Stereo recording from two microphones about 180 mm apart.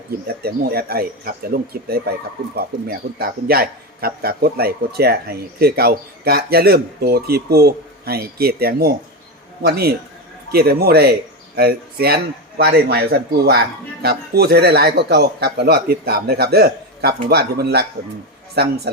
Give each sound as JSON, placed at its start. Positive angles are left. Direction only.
{"t": 0.4, "sound": "a man's voice", "side_deg": -60}